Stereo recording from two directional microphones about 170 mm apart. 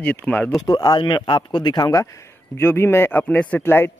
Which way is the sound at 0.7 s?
25° left (ahead or behind).